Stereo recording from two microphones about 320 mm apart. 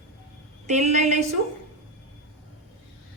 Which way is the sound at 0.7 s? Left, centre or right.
Right.